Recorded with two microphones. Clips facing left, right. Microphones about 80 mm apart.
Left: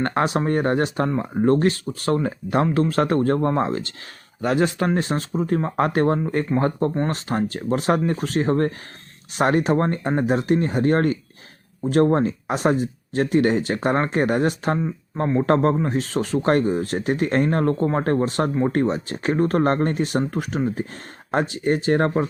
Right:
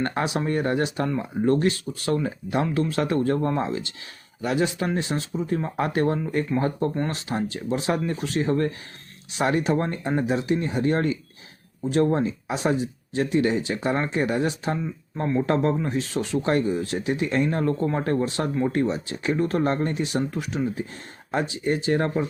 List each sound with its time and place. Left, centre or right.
0.0 s speech: left
7.3 s speech: left
14.8 s speech: left
15.4 s speech: left